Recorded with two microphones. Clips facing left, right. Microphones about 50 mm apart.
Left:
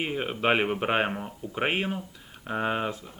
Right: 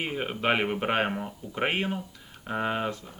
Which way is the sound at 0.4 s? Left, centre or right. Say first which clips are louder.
Left 1 dB; centre.